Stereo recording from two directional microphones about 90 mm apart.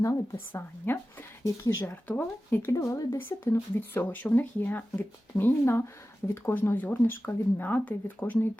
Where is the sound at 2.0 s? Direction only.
20° left (ahead or behind); by 3.0 s 35° left (ahead or behind).